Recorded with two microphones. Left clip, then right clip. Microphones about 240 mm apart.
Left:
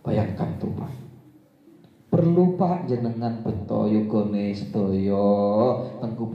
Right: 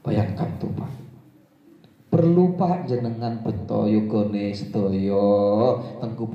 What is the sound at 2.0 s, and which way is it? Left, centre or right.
A man's voice, right.